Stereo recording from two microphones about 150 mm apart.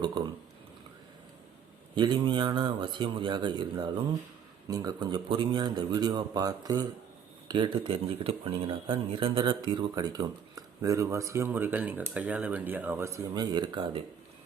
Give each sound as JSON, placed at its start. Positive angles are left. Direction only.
{"t": 0.2, "sound": "speech", "side_deg": -30}
{"t": 2.0, "sound": "a man's voice", "side_deg": -30}